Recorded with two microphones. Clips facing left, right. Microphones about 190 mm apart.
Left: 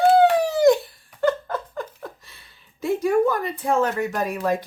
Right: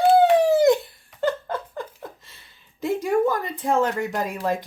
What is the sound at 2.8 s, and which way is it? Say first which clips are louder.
Speech: left 2 dB; 20° right (ahead or behind).